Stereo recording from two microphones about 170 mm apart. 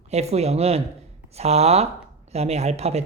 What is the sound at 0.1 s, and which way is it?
Speech, 40° right (ahead or behind).